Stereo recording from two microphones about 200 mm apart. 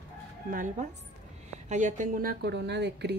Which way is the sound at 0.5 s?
40° right (ahead or behind).